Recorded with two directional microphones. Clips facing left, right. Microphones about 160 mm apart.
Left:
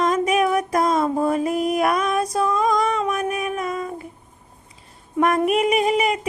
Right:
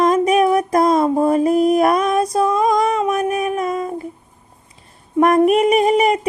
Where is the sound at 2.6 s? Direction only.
40° right (ahead or behind).